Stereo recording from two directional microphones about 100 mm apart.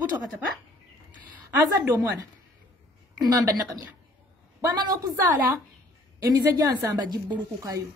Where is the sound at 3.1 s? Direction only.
40° right (ahead or behind).